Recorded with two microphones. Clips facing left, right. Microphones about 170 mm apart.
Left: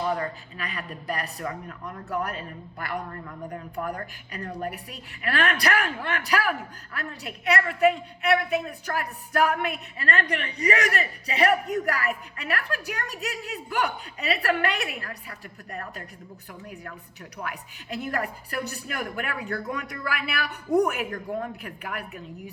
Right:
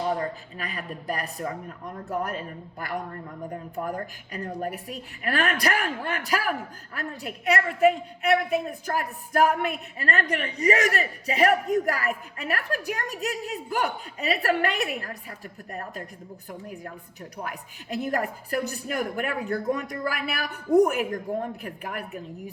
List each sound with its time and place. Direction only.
0.5 s a man's voice: 45° right (ahead or behind)
3.2 s a woman's voice: 25° right (ahead or behind)
4.6 s a man's voice: 45° right (ahead or behind)
21.1 s a woman's voice: 25° right (ahead or behind)
21.5 s a man's voice: 40° right (ahead or behind)